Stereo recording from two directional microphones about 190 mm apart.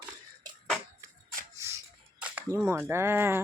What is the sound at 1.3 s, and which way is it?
Shuffle, 15° right (ahead or behind).